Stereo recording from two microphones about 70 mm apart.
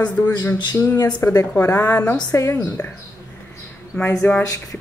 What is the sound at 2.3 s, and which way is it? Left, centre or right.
Speech, left.